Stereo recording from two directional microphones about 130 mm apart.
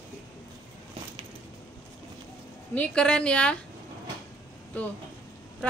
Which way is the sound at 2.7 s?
10° left (ahead or behind).